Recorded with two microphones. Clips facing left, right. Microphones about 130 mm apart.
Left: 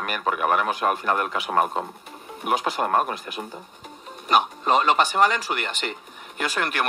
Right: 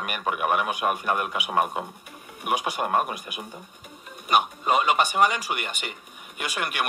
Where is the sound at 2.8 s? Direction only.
40° left (ahead or behind).